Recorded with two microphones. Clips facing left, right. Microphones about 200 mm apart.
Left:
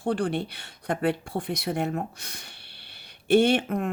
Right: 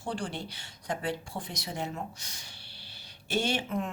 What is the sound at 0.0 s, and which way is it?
Speech, 60° left (ahead or behind).